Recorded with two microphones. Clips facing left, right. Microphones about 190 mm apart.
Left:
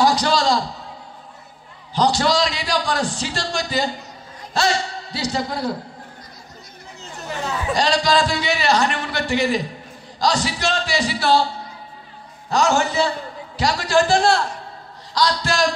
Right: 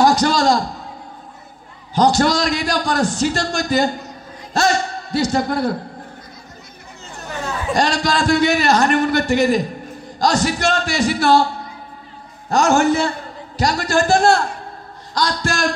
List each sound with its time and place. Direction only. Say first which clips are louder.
0.0 s a man's voice: right 3 dB; 45° right (ahead or behind)
2.0 s a man's voice: right 3 dB; 50° right (ahead or behind)
7.7 s a man's voice: even; 50° right (ahead or behind)